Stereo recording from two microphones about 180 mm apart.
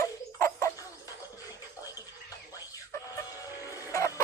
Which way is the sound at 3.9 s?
15° left (ahead or behind).